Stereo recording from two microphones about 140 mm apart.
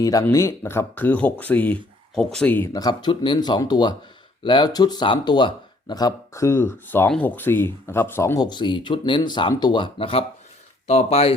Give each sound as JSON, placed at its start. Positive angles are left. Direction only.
{"t": 0.0, "sound": "speech", "side_deg": 25}
{"t": 2.7, "sound": "speech", "side_deg": 30}